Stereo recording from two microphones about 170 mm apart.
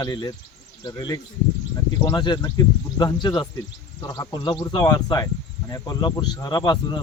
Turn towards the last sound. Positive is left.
turn(degrees=25)  # may be behind; listen again after turning